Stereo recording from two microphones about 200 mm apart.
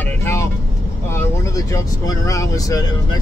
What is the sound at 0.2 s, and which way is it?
Vehicle, 15° left (ahead or behind).